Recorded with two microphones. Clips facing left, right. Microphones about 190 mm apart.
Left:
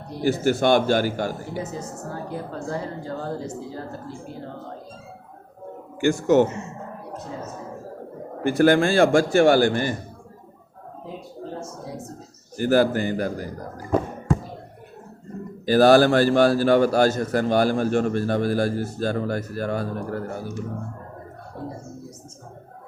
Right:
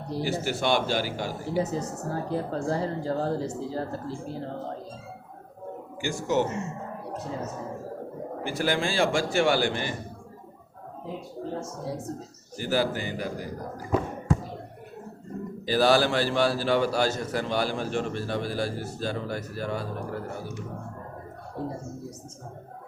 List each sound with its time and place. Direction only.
0.3 s a man's voice: 50° left (ahead or behind)
1.5 s a woman's voice: 35° right (ahead or behind)
6.0 s speech: 55° left (ahead or behind)
8.4 s a man's voice: 55° left (ahead or behind)
12.5 s a man's voice: 50° left (ahead or behind)
15.6 s a man's voice: 50° left (ahead or behind)